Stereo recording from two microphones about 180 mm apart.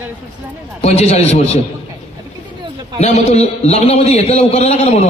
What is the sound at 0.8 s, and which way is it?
Speech, 35° left (ahead or behind).